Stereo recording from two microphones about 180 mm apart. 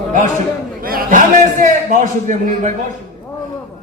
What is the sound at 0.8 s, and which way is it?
A man's voice, 50° right (ahead or behind).